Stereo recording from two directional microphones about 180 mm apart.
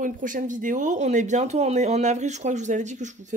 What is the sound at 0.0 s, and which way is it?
Speech, 45° right (ahead or behind).